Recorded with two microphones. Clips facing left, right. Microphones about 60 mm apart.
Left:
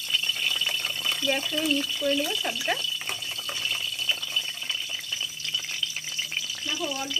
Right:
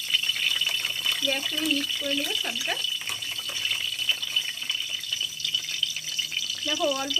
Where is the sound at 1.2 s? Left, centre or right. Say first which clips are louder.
Left 3 dB; centre.